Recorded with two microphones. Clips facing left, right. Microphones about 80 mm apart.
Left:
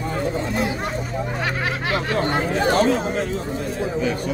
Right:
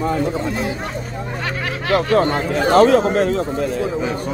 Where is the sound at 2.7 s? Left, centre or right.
Right.